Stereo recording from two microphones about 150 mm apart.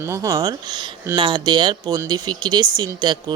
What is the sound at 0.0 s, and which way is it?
Speech, 20° right (ahead or behind).